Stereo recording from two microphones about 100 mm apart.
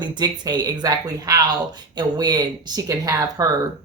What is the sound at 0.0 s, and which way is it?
A woman's voice, 50° right (ahead or behind).